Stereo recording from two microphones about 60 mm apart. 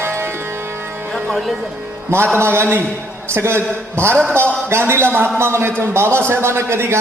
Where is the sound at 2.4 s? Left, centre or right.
Right.